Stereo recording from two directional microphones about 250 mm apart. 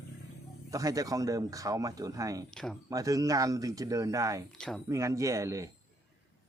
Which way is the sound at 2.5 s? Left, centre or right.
Centre.